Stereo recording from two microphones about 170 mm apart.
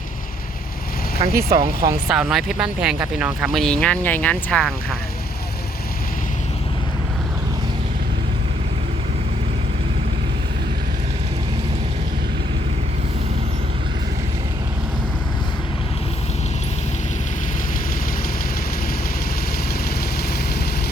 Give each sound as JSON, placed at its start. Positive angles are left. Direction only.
{"t": 1.4, "sound": "speech", "side_deg": -20}
{"t": 2.0, "sound": "speech", "side_deg": -5}